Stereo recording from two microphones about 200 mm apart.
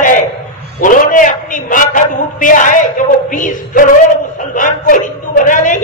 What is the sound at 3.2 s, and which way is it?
A woman's voice, 40° left (ahead or behind).